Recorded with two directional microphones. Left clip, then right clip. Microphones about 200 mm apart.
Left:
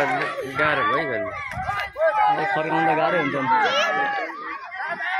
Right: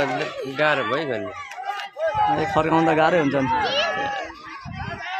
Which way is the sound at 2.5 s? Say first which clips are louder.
Right 2 dB; 45° right (ahead or behind).